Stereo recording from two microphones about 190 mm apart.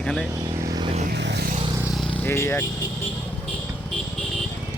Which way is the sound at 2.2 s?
15° left (ahead or behind).